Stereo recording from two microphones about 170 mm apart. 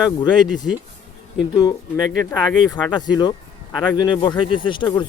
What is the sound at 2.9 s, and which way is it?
Speech, 25° left (ahead or behind).